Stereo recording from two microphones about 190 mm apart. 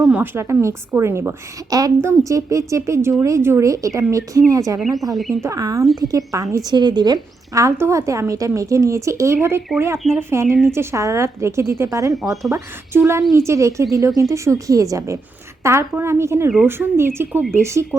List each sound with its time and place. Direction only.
0.0 s a woman's voice: 5° right (ahead or behind)
4.8 s speech: centre (ahead or behind)
5.4 s a woman's voice: 20° right (ahead or behind)